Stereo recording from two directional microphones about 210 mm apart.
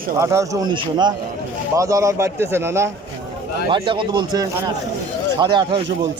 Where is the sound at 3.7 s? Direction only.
25° right (ahead or behind).